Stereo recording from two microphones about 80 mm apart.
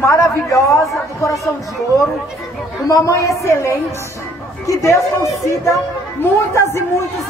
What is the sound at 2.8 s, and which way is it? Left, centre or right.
Speech, left.